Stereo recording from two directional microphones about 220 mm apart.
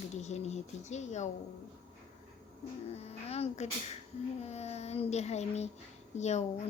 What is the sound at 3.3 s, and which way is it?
A woman's voice, 30° left (ahead or behind).